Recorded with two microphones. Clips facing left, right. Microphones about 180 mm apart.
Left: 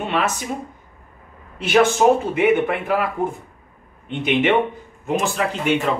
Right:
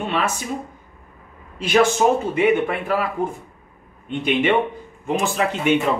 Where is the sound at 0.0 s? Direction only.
5° left (ahead or behind).